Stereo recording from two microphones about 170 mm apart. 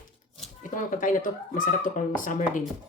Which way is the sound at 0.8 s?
50° left (ahead or behind).